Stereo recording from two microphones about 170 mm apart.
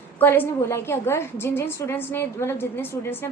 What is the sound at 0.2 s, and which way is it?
A woman's voice, 10° left (ahead or behind).